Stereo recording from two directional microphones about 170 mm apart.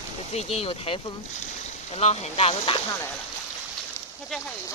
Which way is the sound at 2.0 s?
35° left (ahead or behind).